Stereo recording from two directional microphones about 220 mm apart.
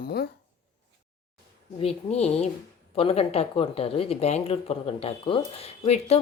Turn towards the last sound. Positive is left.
turn(degrees=30)  # may be behind; listen again after turning